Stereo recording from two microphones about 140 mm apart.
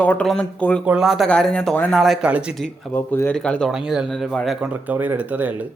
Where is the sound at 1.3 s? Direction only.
5° left (ahead or behind).